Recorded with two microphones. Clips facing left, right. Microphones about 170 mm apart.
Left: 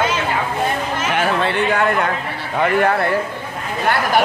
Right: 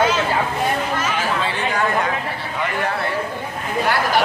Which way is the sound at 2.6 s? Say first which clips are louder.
Left 8 dB; 55° left (ahead or behind).